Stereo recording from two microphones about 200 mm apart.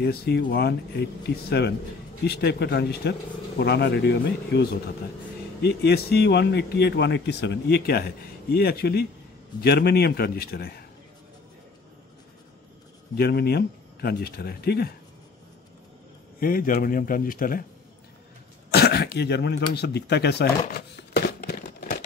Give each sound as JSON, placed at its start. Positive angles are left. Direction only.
{"t": 0.0, "sound": "speech", "side_deg": 55}
{"t": 13.1, "sound": "speech", "side_deg": 50}
{"t": 16.3, "sound": "speech", "side_deg": 45}
{"t": 18.7, "sound": "throat clearing", "side_deg": 55}